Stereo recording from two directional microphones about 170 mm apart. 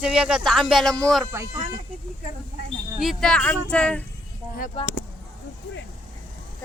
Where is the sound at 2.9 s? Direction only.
Centre (ahead or behind).